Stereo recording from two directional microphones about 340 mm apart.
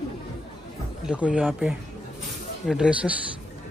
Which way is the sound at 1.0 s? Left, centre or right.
Centre.